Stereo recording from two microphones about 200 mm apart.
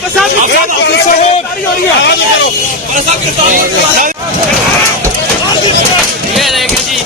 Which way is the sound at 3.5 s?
45° right (ahead or behind).